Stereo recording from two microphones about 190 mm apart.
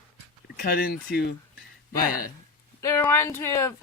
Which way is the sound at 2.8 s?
15° left (ahead or behind).